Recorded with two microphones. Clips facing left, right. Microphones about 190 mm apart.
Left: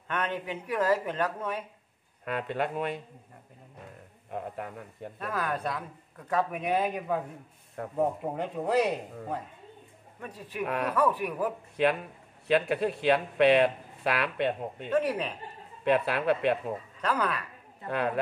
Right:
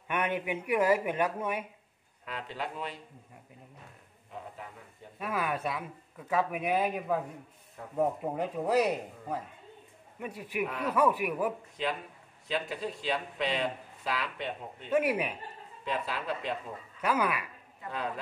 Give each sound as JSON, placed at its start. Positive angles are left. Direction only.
{"t": 0.1, "sound": "speech", "side_deg": -10}
{"t": 2.2, "sound": "speech", "side_deg": 55}
{"t": 4.3, "sound": "speech", "side_deg": 60}
{"t": 5.2, "sound": "a man's voice", "side_deg": -10}
{"t": 10.7, "sound": "speech", "side_deg": 75}
{"t": 11.0, "sound": "speech", "side_deg": -10}
{"t": 11.7, "sound": "speech", "side_deg": 60}
{"t": 14.9, "sound": "speech", "side_deg": -10}
{"t": 15.8, "sound": "speech", "side_deg": 65}
{"t": 17.0, "sound": "speech", "side_deg": -10}
{"t": 17.8, "sound": "speech", "side_deg": 65}